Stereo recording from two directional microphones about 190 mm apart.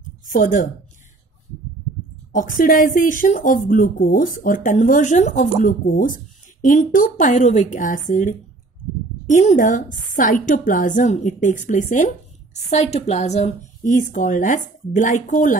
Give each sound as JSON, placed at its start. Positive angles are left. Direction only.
{"t": 0.3, "sound": "speech", "side_deg": 40}
{"t": 2.3, "sound": "a woman's voice", "side_deg": 45}